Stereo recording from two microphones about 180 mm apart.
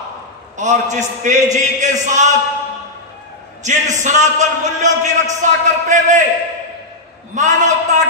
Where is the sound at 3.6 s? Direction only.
40° right (ahead or behind).